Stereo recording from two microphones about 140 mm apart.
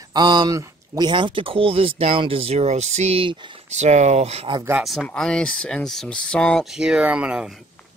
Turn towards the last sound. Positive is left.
turn(degrees=-5)  # may be behind; listen again after turning